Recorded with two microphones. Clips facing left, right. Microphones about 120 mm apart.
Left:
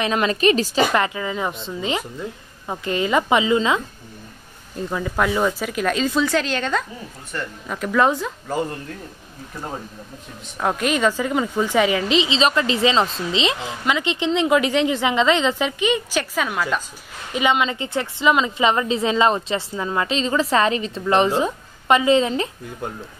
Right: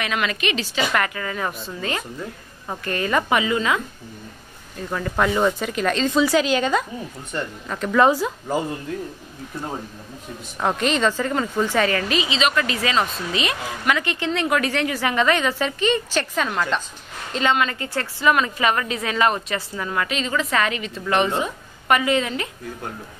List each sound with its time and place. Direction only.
0.0 s a woman's voice: 35° left (ahead or behind)
0.9 s a woman's voice: 20° left (ahead or behind)
4.9 s speech: 5° left (ahead or behind)
7.6 s speech: 5° left (ahead or behind)
10.6 s a woman's voice: 5° left (ahead or behind)
12.2 s a woman's voice: 30° left (ahead or behind)